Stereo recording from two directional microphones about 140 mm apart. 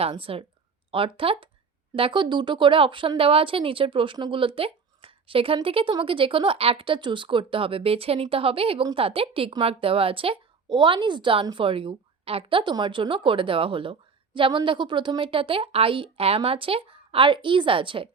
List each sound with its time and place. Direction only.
0.0 s a woman's voice: 40° right (ahead or behind)